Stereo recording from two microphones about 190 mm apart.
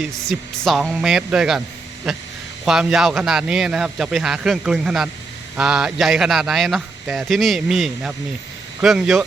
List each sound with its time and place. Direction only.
0.0 s a man's voice: centre (ahead or behind)